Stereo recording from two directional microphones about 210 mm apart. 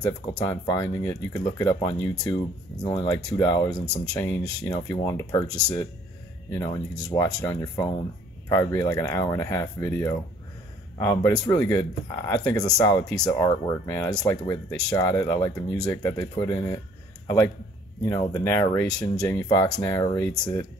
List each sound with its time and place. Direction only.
0.3 s speech: 15° left (ahead or behind)
7.1 s speech: 15° left (ahead or behind)
18.0 s speech: 15° left (ahead or behind)